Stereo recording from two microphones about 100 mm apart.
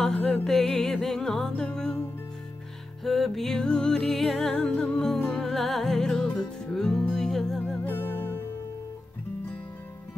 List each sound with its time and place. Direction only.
0.0 s music: 5° left (ahead or behind)
3.0 s music: centre (ahead or behind)
7.8 s music: 20° left (ahead or behind)